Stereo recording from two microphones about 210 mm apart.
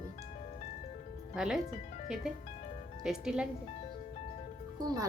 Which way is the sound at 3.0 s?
Centre (ahead or behind).